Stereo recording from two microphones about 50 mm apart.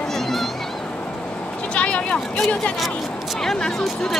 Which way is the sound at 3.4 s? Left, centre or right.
Centre.